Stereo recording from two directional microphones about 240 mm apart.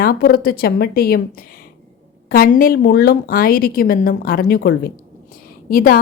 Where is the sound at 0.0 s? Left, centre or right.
Left.